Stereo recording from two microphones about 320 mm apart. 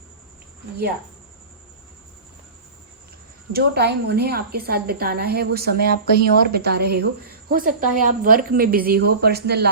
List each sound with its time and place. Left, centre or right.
3.5 s a woman's voice: right